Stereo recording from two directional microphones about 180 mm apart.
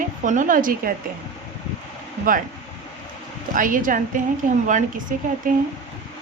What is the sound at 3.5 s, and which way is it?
A woman's voice, 50° right (ahead or behind).